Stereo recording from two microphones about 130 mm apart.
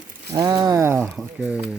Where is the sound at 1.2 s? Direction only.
5° right (ahead or behind).